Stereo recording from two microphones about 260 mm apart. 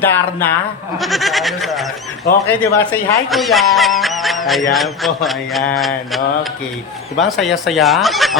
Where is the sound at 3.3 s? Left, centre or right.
Centre.